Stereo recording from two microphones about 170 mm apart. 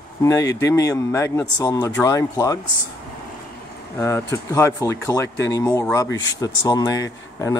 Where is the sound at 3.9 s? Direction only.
15° left (ahead or behind).